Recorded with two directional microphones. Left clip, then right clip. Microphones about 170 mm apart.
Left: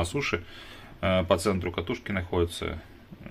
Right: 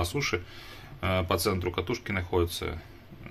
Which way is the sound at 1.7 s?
5° left (ahead or behind).